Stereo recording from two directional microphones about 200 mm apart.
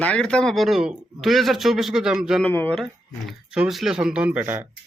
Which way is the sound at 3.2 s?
5° right (ahead or behind).